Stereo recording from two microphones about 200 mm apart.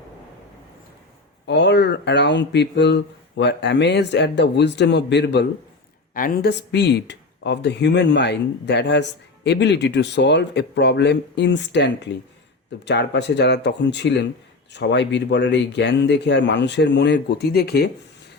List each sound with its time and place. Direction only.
1.5 s speech: 60° left (ahead or behind)
6.1 s speech: 45° left (ahead or behind)